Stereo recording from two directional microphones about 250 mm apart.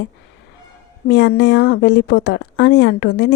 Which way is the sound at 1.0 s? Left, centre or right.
Left.